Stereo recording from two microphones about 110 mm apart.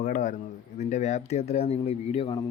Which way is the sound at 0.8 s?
90° left.